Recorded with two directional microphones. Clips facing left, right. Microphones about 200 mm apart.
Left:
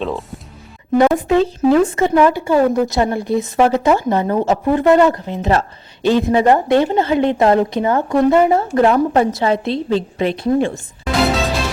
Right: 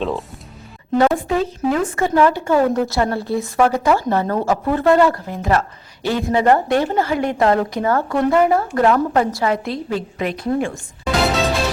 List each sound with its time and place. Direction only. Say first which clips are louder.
0.0 s speech: even; centre (ahead or behind)
0.9 s a woman's voice: left 4 dB; 20° left (ahead or behind)